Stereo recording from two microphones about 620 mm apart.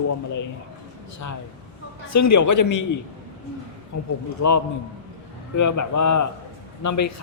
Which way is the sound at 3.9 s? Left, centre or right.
Left.